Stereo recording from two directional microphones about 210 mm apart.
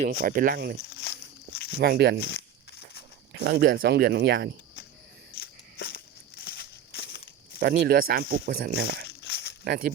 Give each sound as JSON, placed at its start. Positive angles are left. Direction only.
{"t": 0.0, "sound": "speech", "side_deg": -45}
{"t": 0.9, "sound": "walk", "side_deg": 50}
{"t": 1.8, "sound": "speech", "side_deg": -50}
{"t": 2.2, "sound": "a sound", "side_deg": 50}
{"t": 3.3, "sound": "speech", "side_deg": -55}
{"t": 5.4, "sound": "a sound", "side_deg": 45}
{"t": 7.6, "sound": "speech", "side_deg": -45}
{"t": 9.0, "sound": "crumpling", "side_deg": 50}
{"t": 9.6, "sound": "speech", "side_deg": -45}